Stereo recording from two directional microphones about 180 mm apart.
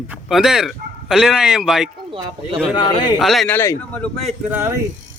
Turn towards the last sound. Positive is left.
turn(degrees=-10)  # may be behind; listen again after turning